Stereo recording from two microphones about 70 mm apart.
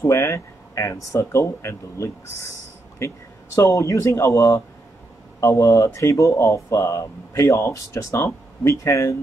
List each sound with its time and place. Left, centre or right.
0.0 s speech: left
3.5 s speech: left